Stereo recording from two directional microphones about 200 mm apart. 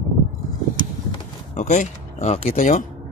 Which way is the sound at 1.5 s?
35° left (ahead or behind).